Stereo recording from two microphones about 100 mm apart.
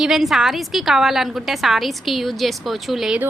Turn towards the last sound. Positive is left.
turn(degrees=0)  # may be behind; listen again after turning